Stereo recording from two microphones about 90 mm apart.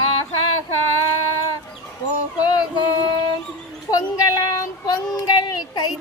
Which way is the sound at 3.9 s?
45° left (ahead or behind).